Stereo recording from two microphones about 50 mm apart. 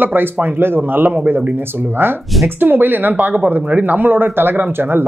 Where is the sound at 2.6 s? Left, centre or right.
Right.